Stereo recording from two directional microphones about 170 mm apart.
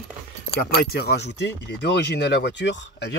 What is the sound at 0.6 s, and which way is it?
Speech, 65° left (ahead or behind).